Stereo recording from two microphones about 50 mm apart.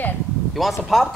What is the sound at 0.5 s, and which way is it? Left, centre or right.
Speech, centre.